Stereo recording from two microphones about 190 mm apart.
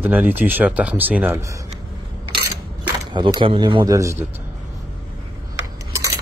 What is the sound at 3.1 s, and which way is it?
A man's voice, 20° right (ahead or behind).